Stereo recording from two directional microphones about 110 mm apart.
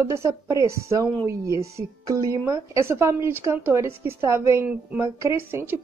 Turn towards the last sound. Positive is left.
turn(degrees=-25)  # may be behind; listen again after turning